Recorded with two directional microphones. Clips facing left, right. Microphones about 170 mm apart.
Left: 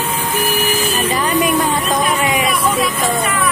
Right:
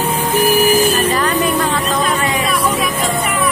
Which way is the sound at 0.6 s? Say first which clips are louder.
Right 6 dB; 40° right (ahead or behind).